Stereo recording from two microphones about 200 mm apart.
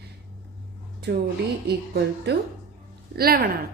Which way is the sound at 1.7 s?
55° right (ahead or behind).